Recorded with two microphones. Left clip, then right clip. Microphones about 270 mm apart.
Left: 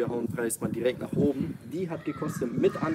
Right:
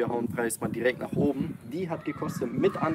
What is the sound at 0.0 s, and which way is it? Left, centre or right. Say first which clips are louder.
Speech: right 1 dB; centre.